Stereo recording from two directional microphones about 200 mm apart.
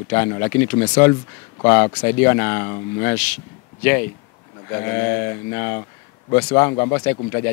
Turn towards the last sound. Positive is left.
turn(degrees=15)  # may be behind; listen again after turning